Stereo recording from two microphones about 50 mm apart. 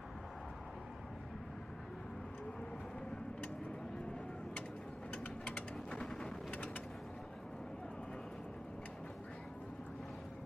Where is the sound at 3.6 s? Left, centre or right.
Centre.